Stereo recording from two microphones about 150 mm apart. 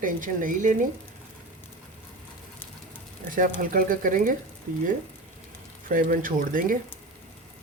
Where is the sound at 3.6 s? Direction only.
65° right (ahead or behind).